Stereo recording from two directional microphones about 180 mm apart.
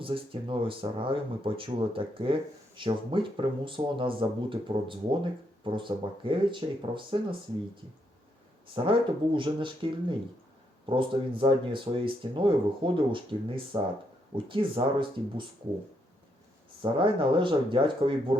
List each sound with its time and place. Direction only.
0.0 s speech: 30° right (ahead or behind)
8.7 s speech: 30° right (ahead or behind)
16.8 s speech: 30° right (ahead or behind)